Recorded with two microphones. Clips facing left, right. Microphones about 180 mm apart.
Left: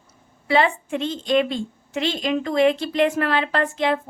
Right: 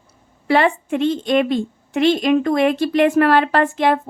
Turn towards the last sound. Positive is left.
turn(degrees=-60)  # may be behind; listen again after turning